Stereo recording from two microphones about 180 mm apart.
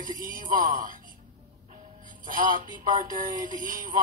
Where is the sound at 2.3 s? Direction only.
50° right (ahead or behind).